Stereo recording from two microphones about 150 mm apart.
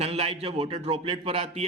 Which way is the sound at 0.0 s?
40° right (ahead or behind).